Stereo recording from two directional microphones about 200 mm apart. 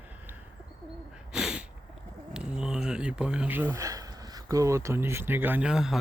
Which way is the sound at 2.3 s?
5° right (ahead or behind).